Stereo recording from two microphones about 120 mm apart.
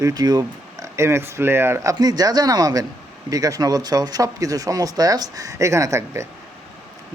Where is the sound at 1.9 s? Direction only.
30° right (ahead or behind).